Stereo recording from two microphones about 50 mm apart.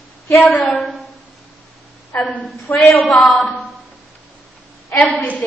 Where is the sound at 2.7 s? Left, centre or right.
Left.